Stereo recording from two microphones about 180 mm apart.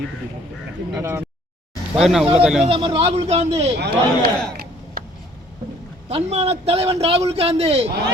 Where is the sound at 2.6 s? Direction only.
30° right (ahead or behind).